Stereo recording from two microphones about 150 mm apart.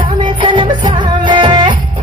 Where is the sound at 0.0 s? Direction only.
30° right (ahead or behind).